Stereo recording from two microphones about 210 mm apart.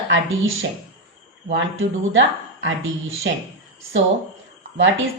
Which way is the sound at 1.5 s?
60° right (ahead or behind).